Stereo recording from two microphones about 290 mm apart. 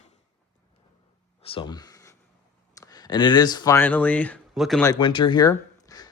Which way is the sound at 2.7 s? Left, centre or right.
Centre.